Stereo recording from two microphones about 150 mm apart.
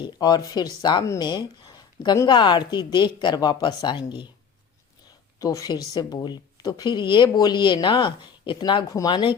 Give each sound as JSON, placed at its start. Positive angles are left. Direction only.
{"t": 0.0, "sound": "a woman's voice", "side_deg": 25}
{"t": 5.4, "sound": "a woman's voice", "side_deg": 20}